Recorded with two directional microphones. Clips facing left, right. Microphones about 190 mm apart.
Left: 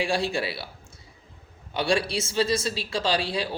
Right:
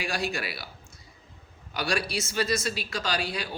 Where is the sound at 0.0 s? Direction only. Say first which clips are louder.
Left 5 dB; 30° left (ahead or behind).